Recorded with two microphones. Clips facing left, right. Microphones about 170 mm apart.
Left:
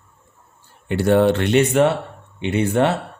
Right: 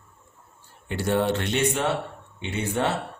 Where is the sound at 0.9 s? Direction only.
65° left (ahead or behind).